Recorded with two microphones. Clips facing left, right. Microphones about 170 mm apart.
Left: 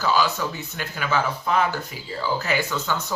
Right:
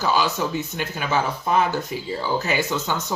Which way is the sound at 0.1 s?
20° right (ahead or behind).